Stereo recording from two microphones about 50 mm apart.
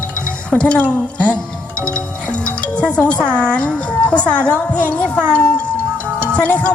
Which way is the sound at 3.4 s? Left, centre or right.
Left.